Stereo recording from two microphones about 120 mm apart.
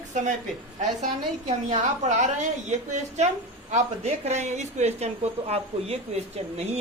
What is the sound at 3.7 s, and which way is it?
A woman's voice, 65° right (ahead or behind).